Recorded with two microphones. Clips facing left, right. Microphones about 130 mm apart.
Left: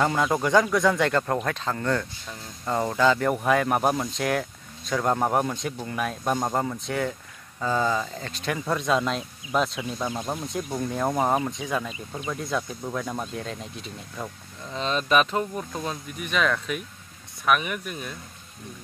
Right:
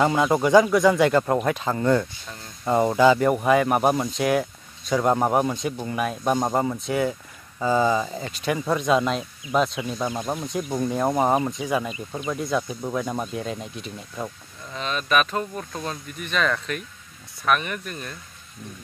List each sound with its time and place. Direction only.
0.0 s speech: 5° right (ahead or behind)
14.7 s speech: 25° left (ahead or behind)
15.7 s speech: 10° left (ahead or behind)